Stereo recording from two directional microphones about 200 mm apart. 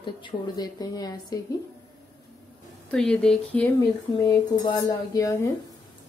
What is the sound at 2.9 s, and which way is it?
Speech, 5° left (ahead or behind).